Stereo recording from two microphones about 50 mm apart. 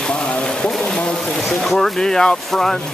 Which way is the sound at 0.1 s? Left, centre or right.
Left.